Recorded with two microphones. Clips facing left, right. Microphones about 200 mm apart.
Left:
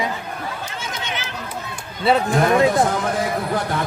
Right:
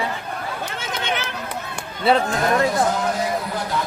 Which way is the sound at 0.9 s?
60° right (ahead or behind).